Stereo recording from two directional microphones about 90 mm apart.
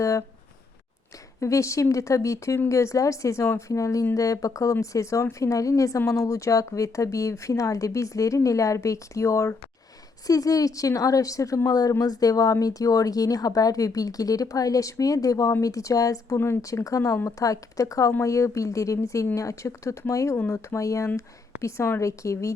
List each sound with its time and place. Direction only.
0.0 s speech: 35° left (ahead or behind)
1.4 s a woman's voice: 35° left (ahead or behind)